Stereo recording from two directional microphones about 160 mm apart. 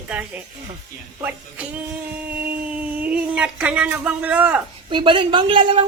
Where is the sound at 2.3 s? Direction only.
10° right (ahead or behind).